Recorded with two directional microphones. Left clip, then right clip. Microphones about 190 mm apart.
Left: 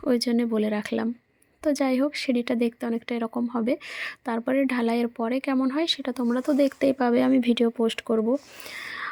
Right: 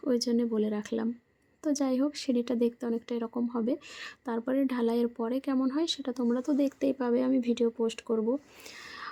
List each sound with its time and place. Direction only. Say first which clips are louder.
0.0 s speech: left 4 dB; 20° left (ahead or behind)